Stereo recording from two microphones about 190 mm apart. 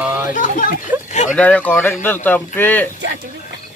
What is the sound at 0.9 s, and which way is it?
Speech, 10° right (ahead or behind).